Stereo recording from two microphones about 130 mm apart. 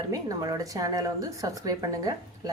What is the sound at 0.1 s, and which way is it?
Speech, 25° right (ahead or behind).